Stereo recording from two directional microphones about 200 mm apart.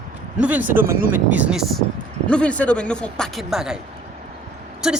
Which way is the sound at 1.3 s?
5° right (ahead or behind).